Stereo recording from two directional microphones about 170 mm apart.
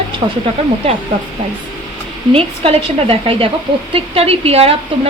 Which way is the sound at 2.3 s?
35° right (ahead or behind).